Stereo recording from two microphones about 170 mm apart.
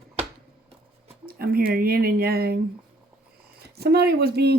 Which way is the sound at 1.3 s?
60° right (ahead or behind).